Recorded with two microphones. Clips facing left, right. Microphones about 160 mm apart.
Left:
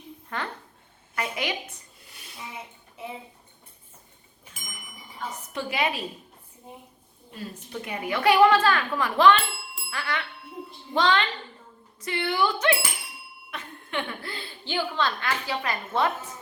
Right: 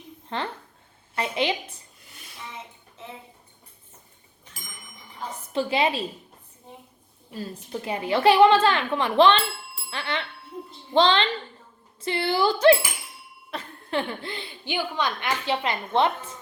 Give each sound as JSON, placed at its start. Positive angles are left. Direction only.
{"t": 0.3, "sound": "a woman's voice", "side_deg": -25}
{"t": 5.5, "sound": "a woman's voice", "side_deg": -25}
{"t": 7.3, "sound": "a woman's voice", "side_deg": -30}